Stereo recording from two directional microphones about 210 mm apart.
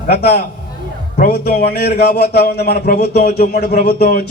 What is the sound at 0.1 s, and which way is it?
Speech, 50° left (ahead or behind).